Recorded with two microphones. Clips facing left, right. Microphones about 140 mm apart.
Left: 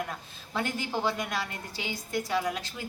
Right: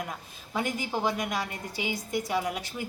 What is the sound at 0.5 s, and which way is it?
A woman's voice, 15° right (ahead or behind).